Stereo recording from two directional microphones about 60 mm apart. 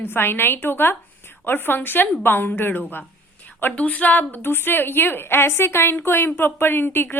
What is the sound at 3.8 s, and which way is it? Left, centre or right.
A woman's voice, left.